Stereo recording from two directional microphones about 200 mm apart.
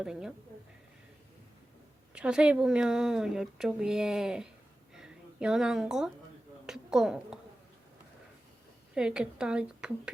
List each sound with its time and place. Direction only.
0.0 s speech: 5° right (ahead or behind)
2.1 s speech: 5° right (ahead or behind)
4.9 s a sound: 5° right (ahead or behind)
6.7 s a woman's voice: centre (ahead or behind)
9.0 s speech: 5° right (ahead or behind)